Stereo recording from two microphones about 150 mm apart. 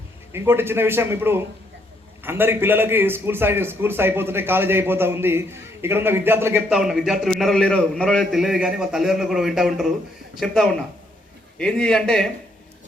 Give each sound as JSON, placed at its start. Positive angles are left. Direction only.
{"t": 0.3, "sound": "a man's voice", "side_deg": -15}
{"t": 6.7, "sound": "a man's voice", "side_deg": -5}